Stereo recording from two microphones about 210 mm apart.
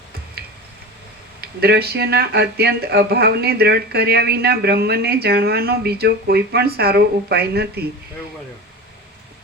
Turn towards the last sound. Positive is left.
turn(degrees=-50)  # may be behind; listen again after turning